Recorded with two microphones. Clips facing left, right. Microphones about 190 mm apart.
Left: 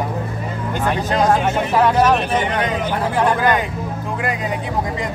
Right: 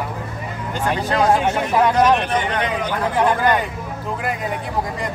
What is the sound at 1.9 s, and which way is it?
Speech, 5° left (ahead or behind).